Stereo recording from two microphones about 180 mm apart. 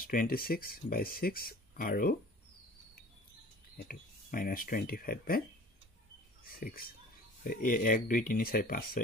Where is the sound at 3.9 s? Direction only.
55° left (ahead or behind).